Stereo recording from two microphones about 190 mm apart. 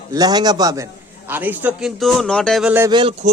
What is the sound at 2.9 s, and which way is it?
Speech, 25° right (ahead or behind).